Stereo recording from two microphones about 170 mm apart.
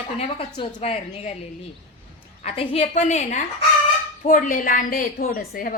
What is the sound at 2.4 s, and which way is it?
A woman's voice, 35° left (ahead or behind).